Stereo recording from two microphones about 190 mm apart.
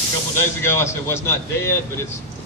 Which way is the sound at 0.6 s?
15° left (ahead or behind).